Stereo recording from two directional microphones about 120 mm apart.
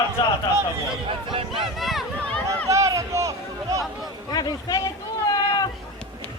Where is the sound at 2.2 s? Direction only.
10° left (ahead or behind).